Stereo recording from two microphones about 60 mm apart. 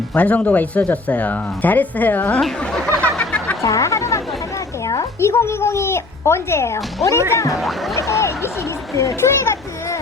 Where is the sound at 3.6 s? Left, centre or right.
Left.